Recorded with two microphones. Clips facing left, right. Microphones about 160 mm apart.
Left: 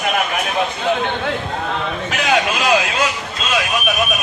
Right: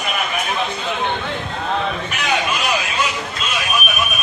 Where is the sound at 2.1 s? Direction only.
90° left.